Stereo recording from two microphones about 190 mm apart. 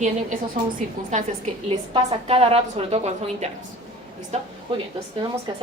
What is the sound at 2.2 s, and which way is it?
A woman's voice, 35° right (ahead or behind).